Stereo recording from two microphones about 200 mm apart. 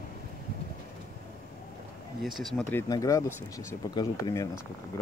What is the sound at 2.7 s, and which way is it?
Speech, 15° left (ahead or behind).